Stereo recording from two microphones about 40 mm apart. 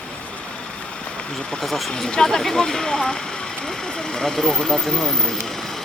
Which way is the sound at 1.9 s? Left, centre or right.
Centre.